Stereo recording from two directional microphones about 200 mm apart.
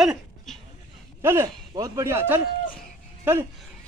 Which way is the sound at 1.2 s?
10° right (ahead or behind).